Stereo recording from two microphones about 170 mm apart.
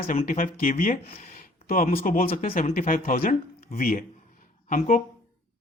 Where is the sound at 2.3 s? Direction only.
35° left (ahead or behind).